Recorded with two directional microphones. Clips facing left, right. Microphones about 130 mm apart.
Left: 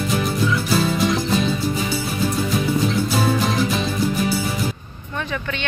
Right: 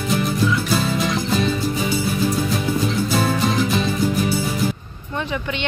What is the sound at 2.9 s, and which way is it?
Music, centre (ahead or behind).